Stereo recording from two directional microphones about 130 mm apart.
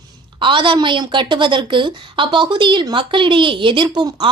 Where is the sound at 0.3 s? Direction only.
40° right (ahead or behind).